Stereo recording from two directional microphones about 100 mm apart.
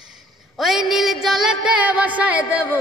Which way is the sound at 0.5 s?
5° right (ahead or behind).